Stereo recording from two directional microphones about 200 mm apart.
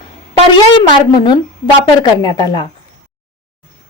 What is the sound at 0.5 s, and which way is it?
A woman's voice, 25° left (ahead or behind).